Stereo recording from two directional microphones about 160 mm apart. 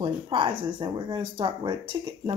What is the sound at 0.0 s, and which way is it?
Speech, 30° right (ahead or behind).